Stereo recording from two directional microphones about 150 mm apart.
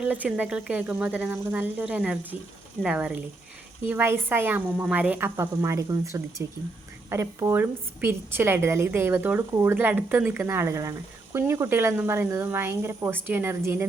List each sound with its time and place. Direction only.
0.0 s a woman's voice: 10° right (ahead or behind)